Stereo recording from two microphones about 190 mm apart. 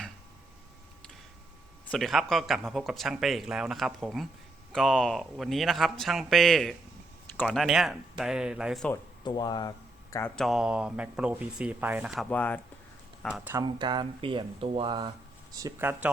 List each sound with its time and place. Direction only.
1.9 s speech: centre (ahead or behind)
9.2 s speech: 20° left (ahead or behind)
10.3 s speech: centre (ahead or behind)
13.2 s speech: 5° right (ahead or behind)
13.5 s speech: 20° right (ahead or behind)
15.5 s speech: 15° right (ahead or behind)